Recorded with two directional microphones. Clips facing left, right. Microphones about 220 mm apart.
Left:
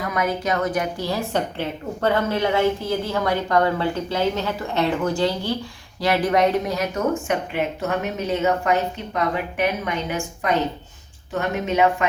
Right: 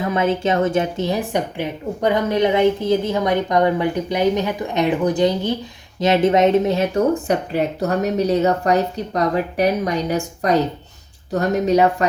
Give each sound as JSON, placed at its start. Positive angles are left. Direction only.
{"t": 0.0, "sound": "a woman's voice", "side_deg": -25}